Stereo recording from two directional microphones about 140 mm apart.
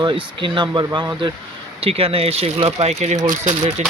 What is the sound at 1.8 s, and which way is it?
Speech, 45° right (ahead or behind).